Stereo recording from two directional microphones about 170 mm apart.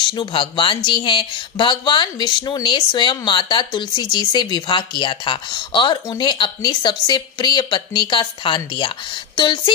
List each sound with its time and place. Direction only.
0.0 s speech: 30° left (ahead or behind)